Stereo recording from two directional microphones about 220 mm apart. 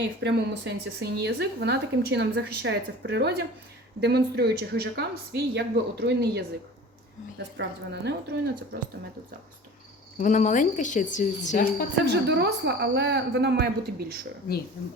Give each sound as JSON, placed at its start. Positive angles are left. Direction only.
{"t": 0.0, "sound": "a woman's voice", "side_deg": -50}
{"t": 10.2, "sound": "a woman's voice", "side_deg": 35}
{"t": 12.0, "sound": "a woman's voice", "side_deg": -50}